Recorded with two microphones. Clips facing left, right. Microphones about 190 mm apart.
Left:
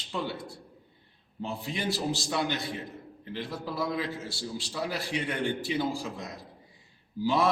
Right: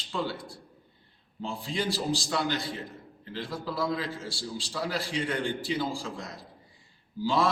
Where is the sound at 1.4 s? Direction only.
20° left (ahead or behind).